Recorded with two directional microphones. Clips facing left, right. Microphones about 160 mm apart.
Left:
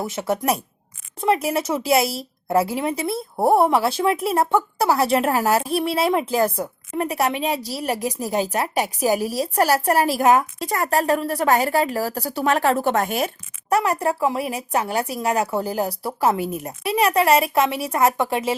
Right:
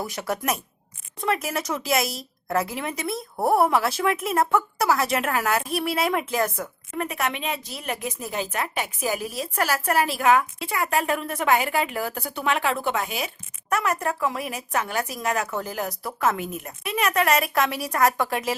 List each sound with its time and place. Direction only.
0.0 s a woman's voice: 25° left (ahead or behind); by 13.3 s 45° left (ahead or behind)
13.7 s a woman's voice: 35° left (ahead or behind)